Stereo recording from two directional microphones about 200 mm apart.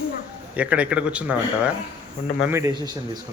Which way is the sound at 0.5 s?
5° right (ahead or behind).